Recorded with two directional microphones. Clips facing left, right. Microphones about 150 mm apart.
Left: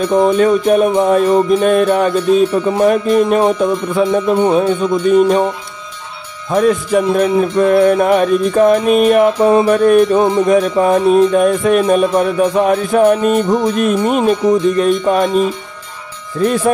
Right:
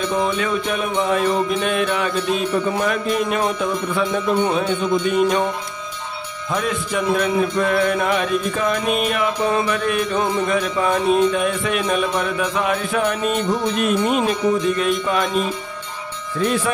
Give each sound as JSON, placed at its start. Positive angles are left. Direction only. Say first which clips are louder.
{"t": 0.1, "sound": "music", "louder": "left 13 dB", "side_deg": 40}
{"t": 6.5, "sound": "music", "louder": "left 10 dB", "side_deg": 40}
{"t": 13.5, "sound": "speech", "louder": "left 6 dB", "side_deg": 45}
{"t": 16.3, "sound": "music", "louder": "left 7 dB", "side_deg": 40}